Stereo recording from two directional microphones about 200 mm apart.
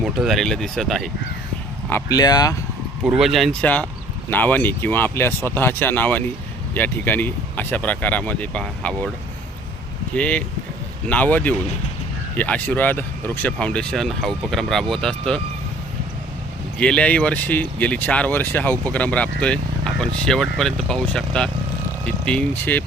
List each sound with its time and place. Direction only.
0.0 s speech: centre (ahead or behind)
1.9 s speech: 15° left (ahead or behind)
3.0 s speech: 5° right (ahead or behind)
10.2 s speech: 5° left (ahead or behind)
16.8 s speech: 5° left (ahead or behind)